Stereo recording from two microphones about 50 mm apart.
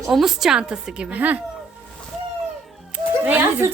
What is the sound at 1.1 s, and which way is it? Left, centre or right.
Speech, right.